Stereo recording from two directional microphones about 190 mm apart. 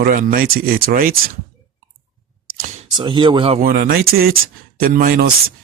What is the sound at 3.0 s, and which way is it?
Speech, 25° right (ahead or behind).